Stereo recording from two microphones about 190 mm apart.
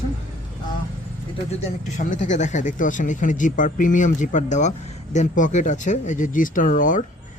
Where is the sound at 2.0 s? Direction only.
40° left (ahead or behind).